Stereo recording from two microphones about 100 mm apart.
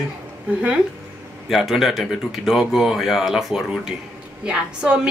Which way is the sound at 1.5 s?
Centre (ahead or behind).